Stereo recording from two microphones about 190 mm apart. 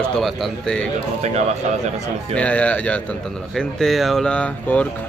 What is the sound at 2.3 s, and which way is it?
A man's voice, 5° left (ahead or behind).